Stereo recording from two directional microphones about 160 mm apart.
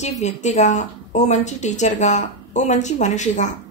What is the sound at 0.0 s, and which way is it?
A woman's voice, 45° left (ahead or behind).